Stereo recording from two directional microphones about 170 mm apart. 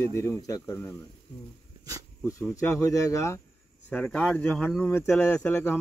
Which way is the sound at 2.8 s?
20° left (ahead or behind).